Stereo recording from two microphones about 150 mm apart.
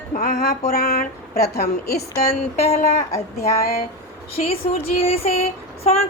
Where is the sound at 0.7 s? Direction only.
90° left.